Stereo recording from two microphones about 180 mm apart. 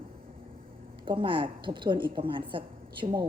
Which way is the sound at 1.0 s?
25° right (ahead or behind).